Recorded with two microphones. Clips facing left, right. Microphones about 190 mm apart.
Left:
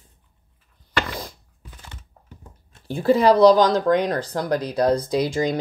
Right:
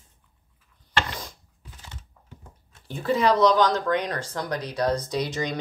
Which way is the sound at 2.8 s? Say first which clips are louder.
Left 6 dB; 35° left (ahead or behind).